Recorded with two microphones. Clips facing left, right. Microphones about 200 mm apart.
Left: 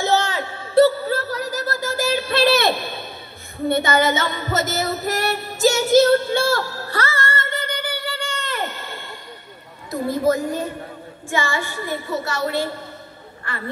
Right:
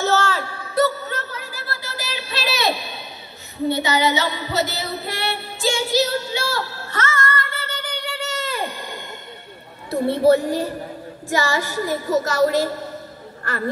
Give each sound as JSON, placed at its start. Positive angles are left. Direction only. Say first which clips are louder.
{"t": 0.0, "sound": "a sound", "louder": "even", "side_deg": 15}
{"t": 3.6, "sound": "female singing", "louder": "left 1 dB", "side_deg": 50}
{"t": 9.8, "sound": "a woman's voice", "louder": "right 4 dB", "side_deg": -30}